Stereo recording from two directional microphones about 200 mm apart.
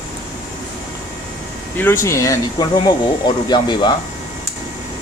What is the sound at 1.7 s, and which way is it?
Speech, 10° left (ahead or behind).